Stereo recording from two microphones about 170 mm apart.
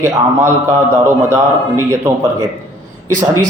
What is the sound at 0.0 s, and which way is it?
A man's voice, 15° right (ahead or behind).